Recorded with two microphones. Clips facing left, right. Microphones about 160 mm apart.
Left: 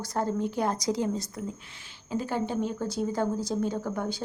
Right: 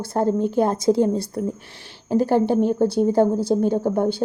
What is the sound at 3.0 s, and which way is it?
A woman's voice, 30° right (ahead or behind).